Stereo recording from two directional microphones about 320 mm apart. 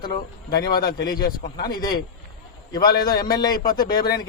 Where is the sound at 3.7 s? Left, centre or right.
Centre.